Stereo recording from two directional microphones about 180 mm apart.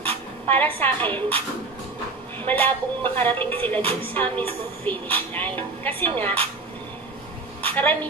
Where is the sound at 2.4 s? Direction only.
10° left (ahead or behind).